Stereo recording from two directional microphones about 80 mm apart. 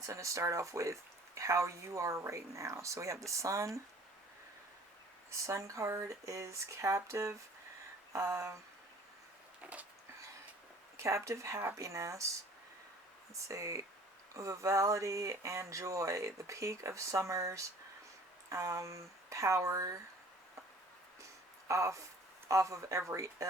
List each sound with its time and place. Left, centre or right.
0.0 s speech: right
5.3 s speech: right
10.9 s speech: right
13.3 s speech: right
21.7 s speech: right